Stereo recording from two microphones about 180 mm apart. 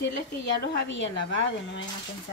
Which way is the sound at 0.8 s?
90° left.